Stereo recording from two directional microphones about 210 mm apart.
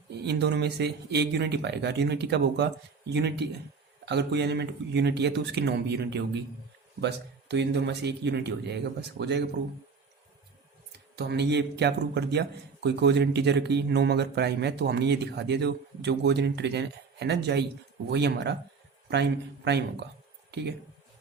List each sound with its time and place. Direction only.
0.1 s a man's voice: 55° right (ahead or behind)
11.2 s a man's voice: 55° right (ahead or behind)